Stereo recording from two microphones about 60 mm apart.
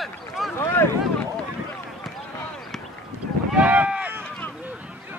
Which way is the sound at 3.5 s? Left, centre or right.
Right.